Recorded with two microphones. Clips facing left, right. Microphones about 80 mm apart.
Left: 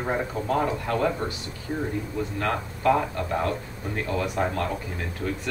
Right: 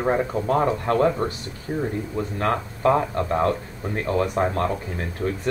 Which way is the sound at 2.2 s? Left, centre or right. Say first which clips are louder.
Right 4 dB; right.